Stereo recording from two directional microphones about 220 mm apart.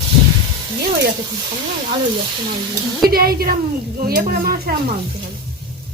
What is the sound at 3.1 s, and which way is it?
Speech, 45° right (ahead or behind).